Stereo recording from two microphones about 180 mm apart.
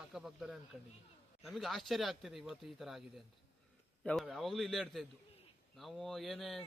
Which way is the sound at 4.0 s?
Centre (ahead or behind).